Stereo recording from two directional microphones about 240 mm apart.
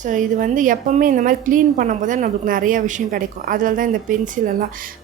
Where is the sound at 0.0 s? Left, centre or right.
Right.